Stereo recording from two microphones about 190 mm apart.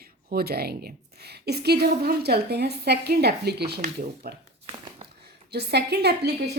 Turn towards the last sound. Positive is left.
turn(degrees=-60)  # may be behind; listen again after turning